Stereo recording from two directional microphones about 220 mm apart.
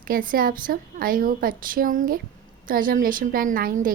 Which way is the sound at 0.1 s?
40° right (ahead or behind).